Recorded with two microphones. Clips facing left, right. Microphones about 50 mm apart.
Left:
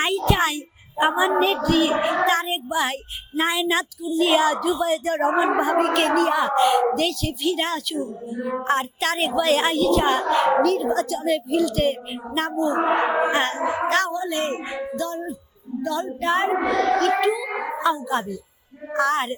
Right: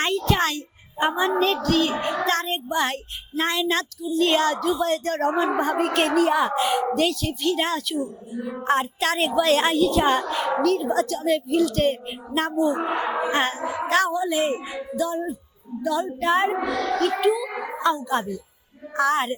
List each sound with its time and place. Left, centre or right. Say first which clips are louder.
0.3 s a woman's voice: left 1 dB; centre
12.8 s speech: left 5 dB; left
13.3 s a woman's voice: left 1 dB; centre
13.6 s speech: left 4 dB; left
13.8 s a woman's voice: right 4 dB; centre
16.6 s speech: left 4 dB; left
17.2 s a woman's voice: even; centre